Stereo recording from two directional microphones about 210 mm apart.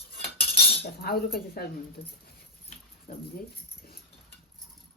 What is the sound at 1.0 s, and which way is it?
Speech, 45° left (ahead or behind).